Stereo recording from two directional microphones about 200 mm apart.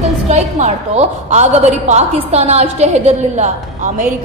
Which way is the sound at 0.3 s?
35° right (ahead or behind).